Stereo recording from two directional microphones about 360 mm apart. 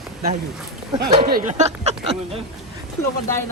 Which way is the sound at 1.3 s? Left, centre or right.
Right.